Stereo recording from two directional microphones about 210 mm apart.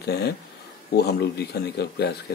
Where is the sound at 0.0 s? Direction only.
50° left (ahead or behind).